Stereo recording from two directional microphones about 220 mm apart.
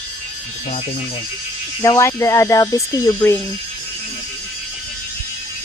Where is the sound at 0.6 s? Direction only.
30° left (ahead or behind).